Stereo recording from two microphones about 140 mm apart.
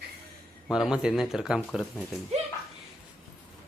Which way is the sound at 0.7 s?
5° right (ahead or behind).